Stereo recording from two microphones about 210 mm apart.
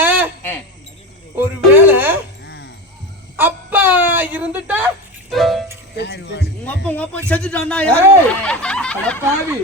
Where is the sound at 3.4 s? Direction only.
10° right (ahead or behind).